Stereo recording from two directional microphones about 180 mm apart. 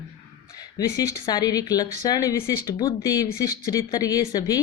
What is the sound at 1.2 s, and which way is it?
Speech, 20° left (ahead or behind).